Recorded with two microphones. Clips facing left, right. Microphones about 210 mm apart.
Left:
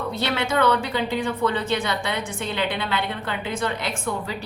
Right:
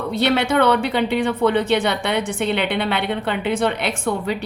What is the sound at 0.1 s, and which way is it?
Speech, 65° right (ahead or behind).